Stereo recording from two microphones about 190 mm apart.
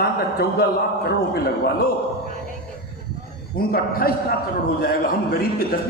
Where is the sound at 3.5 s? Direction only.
50° left (ahead or behind).